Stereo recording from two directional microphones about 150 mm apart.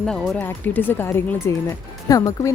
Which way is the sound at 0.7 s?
15° left (ahead or behind).